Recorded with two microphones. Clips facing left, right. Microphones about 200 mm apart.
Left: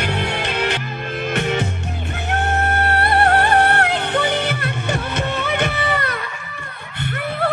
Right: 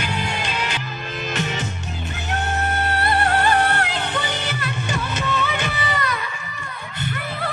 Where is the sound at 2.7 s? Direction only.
60° left (ahead or behind).